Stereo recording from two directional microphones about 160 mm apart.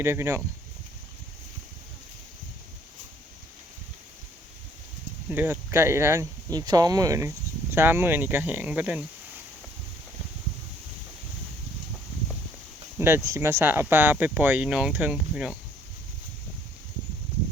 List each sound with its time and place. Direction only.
0.0 s speech: 15° right (ahead or behind)
5.3 s speech: 15° right (ahead or behind)
13.0 s speech: 15° right (ahead or behind)